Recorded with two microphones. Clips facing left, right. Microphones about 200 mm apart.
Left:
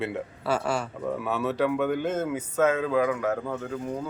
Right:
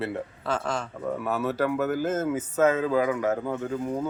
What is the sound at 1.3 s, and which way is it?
Speech, centre (ahead or behind).